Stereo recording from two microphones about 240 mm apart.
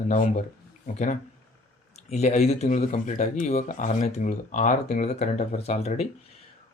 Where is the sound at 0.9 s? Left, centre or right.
Left.